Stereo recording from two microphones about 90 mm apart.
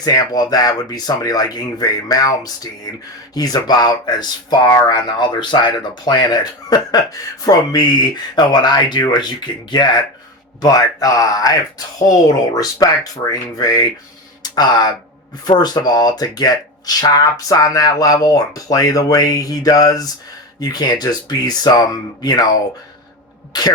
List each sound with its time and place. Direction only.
0.0 s speech: 45° left (ahead or behind)
10.6 s speech: 45° left (ahead or behind)
23.5 s speech: 50° left (ahead or behind)